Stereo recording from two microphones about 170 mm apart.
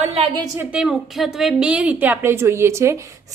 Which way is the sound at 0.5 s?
5° right (ahead or behind).